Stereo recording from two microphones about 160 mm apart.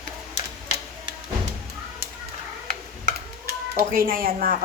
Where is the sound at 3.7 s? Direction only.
65° right (ahead or behind).